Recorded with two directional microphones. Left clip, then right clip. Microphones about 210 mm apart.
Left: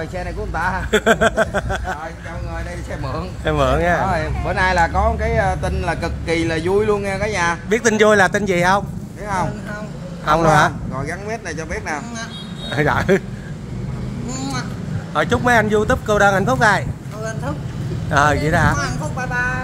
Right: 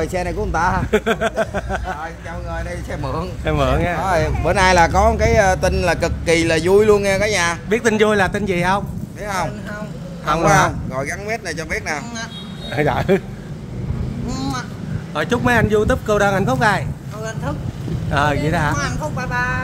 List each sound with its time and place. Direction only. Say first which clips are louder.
0.0 s speech: right 5 dB; 60° right (ahead or behind)
0.9 s speech: left 8 dB; 5° left (ahead or behind)
3.4 s speech: left 2 dB; centre (ahead or behind)
4.0 s speech: right 2 dB; 60° right (ahead or behind)
7.7 s a man's voice: left 3 dB; 10° left (ahead or behind)
10.2 s a man's voice: left 1 dB; 10° left (ahead or behind)
11.2 s speech: right 2 dB; 50° right (ahead or behind)
12.7 s a man's voice: left 1 dB; 10° left (ahead or behind)
15.1 s speech: left 2 dB; centre (ahead or behind)